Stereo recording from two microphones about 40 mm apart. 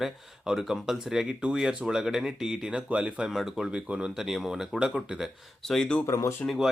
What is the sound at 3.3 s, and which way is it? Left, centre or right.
Speech, centre.